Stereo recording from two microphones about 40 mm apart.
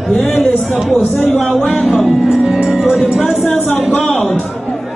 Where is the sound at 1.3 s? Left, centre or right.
Left.